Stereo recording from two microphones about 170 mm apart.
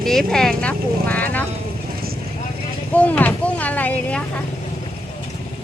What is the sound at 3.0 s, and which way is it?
Speech, 10° left (ahead or behind).